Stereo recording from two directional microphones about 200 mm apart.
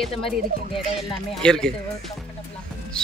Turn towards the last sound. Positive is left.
turn(degrees=5)  # may be behind; listen again after turning